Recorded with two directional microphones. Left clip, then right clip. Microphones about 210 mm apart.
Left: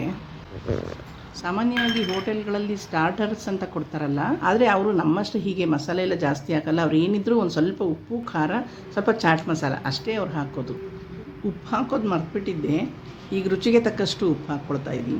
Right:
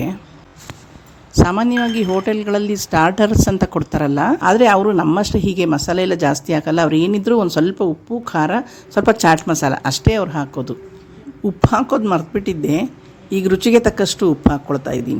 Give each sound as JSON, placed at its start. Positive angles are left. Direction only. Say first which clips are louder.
{"t": 1.4, "sound": "speech", "louder": "right 9 dB", "side_deg": -45}